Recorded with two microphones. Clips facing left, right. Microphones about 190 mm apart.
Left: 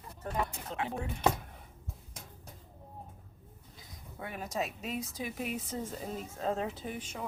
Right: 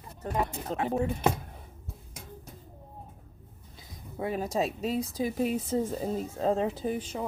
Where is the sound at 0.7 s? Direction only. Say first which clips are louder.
Right 6 dB; 40° right (ahead or behind).